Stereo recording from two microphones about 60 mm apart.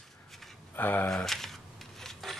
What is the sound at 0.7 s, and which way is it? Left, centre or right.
Speech, left.